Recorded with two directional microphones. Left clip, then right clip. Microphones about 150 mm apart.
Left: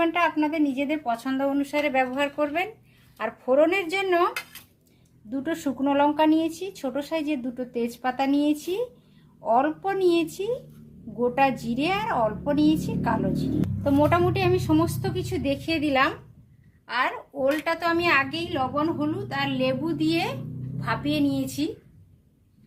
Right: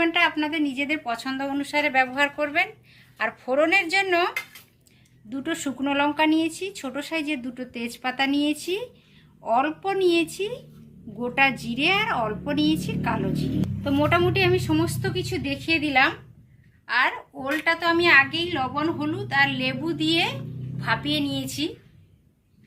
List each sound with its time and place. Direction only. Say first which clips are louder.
0.0 s a woman's voice: right 1 dB; 55° left (ahead or behind)
5.3 s a woman's voice: left 1 dB; 40° left (ahead or behind); by 21.7 s 90° left